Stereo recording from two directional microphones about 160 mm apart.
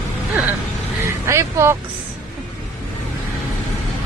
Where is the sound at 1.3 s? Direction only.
15° right (ahead or behind).